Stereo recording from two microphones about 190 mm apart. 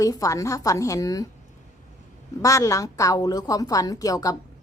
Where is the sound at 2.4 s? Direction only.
15° left (ahead or behind).